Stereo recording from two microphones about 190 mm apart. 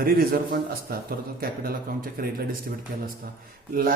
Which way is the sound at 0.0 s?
50° right (ahead or behind).